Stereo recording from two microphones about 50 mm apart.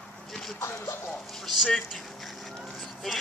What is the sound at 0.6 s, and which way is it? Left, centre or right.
Speech, left.